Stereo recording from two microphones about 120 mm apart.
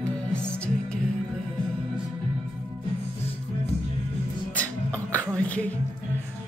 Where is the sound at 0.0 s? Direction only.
10° left (ahead or behind).